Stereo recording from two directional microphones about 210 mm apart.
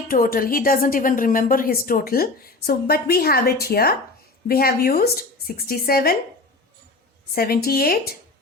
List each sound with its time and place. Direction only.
0.1 s a woman's voice: 45° left (ahead or behind)
7.3 s a woman's voice: 45° left (ahead or behind)